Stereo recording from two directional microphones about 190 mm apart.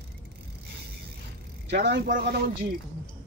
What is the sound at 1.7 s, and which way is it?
Speech, 65° right (ahead or behind).